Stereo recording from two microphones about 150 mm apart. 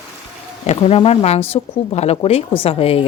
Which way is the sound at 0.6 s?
45° left (ahead or behind).